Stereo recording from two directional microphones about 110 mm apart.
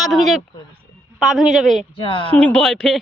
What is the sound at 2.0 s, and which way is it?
Speech, 50° left (ahead or behind).